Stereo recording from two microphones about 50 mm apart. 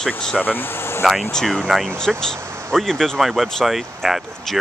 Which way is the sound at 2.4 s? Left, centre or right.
Right.